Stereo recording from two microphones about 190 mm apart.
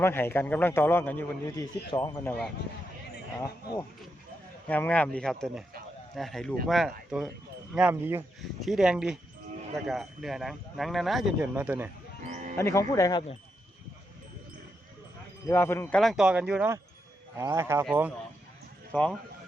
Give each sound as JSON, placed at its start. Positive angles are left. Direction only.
{"t": 0.0, "sound": "a man's voice", "side_deg": 10}
{"t": 2.1, "sound": "a man's voice", "side_deg": 5}
{"t": 3.4, "sound": "a man's voice", "side_deg": 15}
{"t": 12.3, "sound": "music", "side_deg": -40}
{"t": 12.5, "sound": "a man's voice", "side_deg": 15}
{"t": 15.4, "sound": "a man's voice", "side_deg": 15}
{"t": 16.0, "sound": "speech", "side_deg": 0}